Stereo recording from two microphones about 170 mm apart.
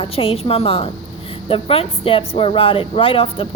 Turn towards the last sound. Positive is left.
turn(degrees=35)  # may be behind; listen again after turning